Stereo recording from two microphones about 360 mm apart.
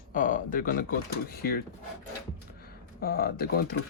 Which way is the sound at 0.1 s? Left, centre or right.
Left.